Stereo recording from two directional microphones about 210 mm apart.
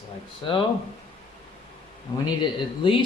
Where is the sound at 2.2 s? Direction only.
25° left (ahead or behind).